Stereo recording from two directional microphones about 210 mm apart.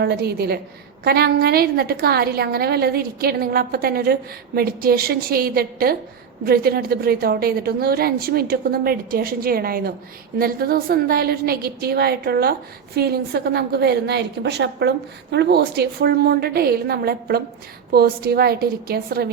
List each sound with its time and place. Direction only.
0.0 s a woman's voice: 50° right (ahead or behind)